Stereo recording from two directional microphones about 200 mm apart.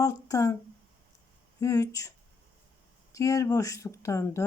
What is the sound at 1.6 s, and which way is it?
Speech, 15° left (ahead or behind).